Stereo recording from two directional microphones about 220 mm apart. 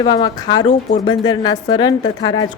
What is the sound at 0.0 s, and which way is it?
A woman's voice, 20° left (ahead or behind).